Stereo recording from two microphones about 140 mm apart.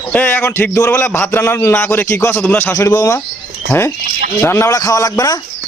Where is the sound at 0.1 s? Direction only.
15° left (ahead or behind).